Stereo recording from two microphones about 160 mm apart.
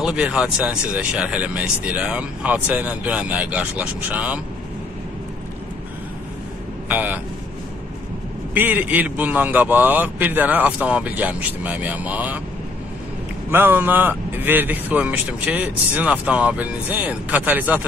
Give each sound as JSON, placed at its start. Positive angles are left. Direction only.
{"t": 0.0, "sound": "speech", "side_deg": -5}
{"t": 6.9, "sound": "speech", "side_deg": -10}
{"t": 8.5, "sound": "speech", "side_deg": -10}
{"t": 13.5, "sound": "speech", "side_deg": -10}